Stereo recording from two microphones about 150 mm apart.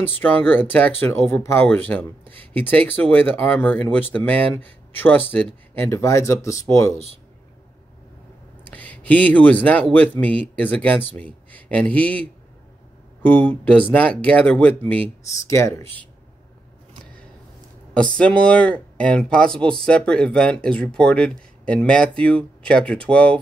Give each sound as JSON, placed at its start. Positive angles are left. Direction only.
{"t": 0.2, "sound": "speech", "side_deg": 10}
{"t": 8.6, "sound": "speech", "side_deg": 10}
{"t": 15.2, "sound": "speech", "side_deg": 20}
{"t": 17.9, "sound": "speech", "side_deg": 5}